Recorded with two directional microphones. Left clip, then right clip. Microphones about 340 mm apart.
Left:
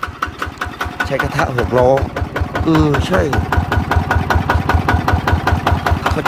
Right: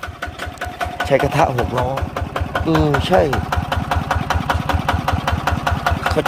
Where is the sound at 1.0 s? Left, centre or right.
Centre.